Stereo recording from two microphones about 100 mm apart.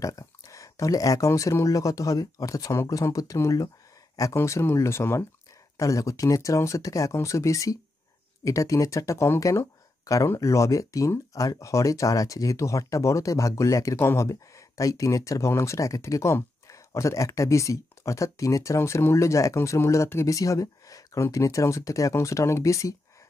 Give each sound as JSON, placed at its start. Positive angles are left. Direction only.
{"t": 0.0, "sound": "speech", "side_deg": 35}